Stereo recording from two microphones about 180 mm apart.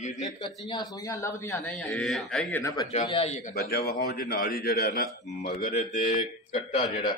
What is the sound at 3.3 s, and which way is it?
A man's voice, 45° left (ahead or behind).